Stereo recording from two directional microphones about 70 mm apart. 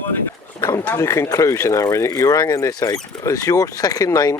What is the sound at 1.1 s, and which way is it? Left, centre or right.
Speech, left.